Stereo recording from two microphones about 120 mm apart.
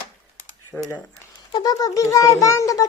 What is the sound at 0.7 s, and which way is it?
Speech, 5° left (ahead or behind).